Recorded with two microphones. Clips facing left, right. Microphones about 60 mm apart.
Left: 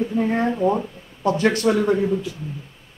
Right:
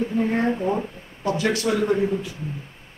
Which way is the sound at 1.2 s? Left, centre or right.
Left.